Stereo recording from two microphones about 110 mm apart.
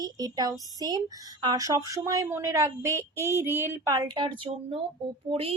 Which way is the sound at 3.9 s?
35° right (ahead or behind).